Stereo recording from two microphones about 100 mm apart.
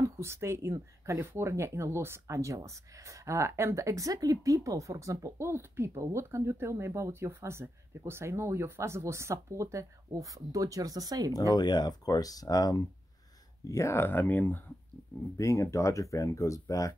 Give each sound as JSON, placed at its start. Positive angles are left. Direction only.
{"t": 0.2, "sound": "speech", "side_deg": -25}
{"t": 11.3, "sound": "speech", "side_deg": 40}
{"t": 15.3, "sound": "speech", "side_deg": 30}